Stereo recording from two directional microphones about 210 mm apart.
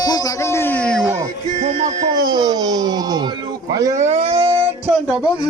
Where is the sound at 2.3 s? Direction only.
20° right (ahead or behind).